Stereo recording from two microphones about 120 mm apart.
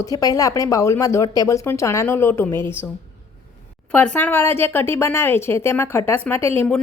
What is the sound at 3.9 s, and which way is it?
A woman's voice, 10° left (ahead or behind).